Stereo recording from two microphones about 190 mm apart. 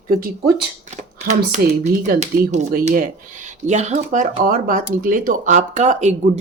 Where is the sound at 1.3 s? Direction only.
40° right (ahead or behind).